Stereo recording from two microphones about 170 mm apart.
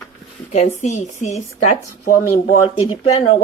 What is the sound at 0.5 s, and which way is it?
Speech, 45° left (ahead or behind).